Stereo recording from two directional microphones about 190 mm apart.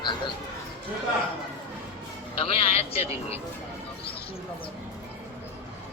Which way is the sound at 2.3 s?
30° left (ahead or behind).